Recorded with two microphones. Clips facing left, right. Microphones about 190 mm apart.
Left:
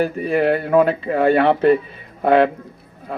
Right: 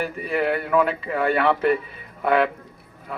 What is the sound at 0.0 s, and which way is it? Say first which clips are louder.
Speech: left 6 dB; 30° left (ahead or behind).